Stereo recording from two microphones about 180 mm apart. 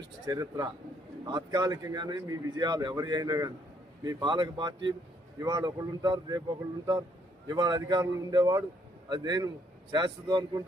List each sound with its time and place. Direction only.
0.3 s speech: 20° right (ahead or behind)
7.4 s speech: 25° right (ahead or behind)